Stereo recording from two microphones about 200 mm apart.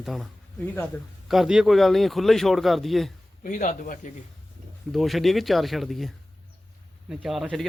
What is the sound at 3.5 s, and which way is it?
Speech, 40° left (ahead or behind).